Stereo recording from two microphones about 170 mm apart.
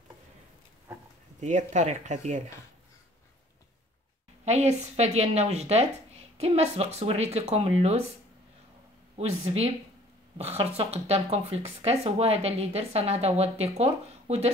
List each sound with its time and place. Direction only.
1.4 s speech: 45° right (ahead or behind)
4.5 s speech: 40° right (ahead or behind)
9.1 s speech: 35° right (ahead or behind)